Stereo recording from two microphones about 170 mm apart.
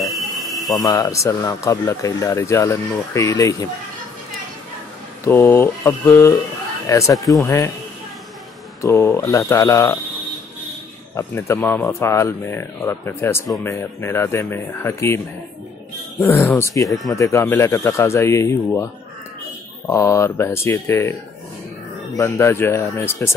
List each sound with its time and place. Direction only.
0.0 s a sound: centre (ahead or behind)
0.8 s speech: 20° left (ahead or behind)
5.2 s speech: 15° left (ahead or behind)
8.8 s speech: 15° left (ahead or behind)
11.1 s speech: 15° left (ahead or behind)
19.9 s speech: 15° left (ahead or behind)